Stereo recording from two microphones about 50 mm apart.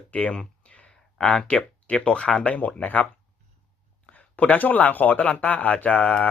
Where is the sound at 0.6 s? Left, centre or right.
Left.